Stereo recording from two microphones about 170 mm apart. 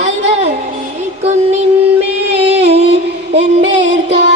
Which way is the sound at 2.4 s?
35° right (ahead or behind).